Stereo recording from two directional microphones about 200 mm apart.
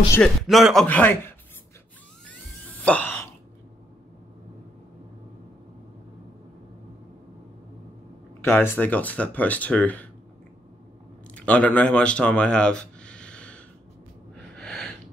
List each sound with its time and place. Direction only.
0.1 s speech: centre (ahead or behind)
2.8 s a sound: 10° left (ahead or behind)
8.5 s speech: 10° left (ahead or behind)
11.3 s speech: 5° left (ahead or behind)
14.3 s gasp: 5° left (ahead or behind)